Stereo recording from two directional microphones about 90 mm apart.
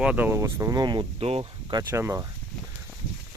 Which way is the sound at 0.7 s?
55° right (ahead or behind).